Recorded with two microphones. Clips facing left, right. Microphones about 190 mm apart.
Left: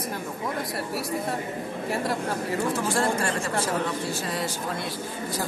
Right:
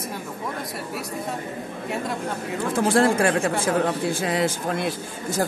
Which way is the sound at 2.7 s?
55° right (ahead or behind).